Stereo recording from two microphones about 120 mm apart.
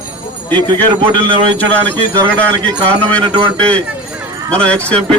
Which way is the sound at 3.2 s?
40° right (ahead or behind).